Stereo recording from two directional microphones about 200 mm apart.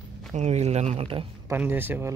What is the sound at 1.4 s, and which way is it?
Speech, 10° right (ahead or behind).